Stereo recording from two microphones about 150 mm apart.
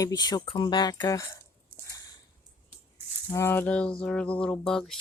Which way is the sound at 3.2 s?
15° left (ahead or behind).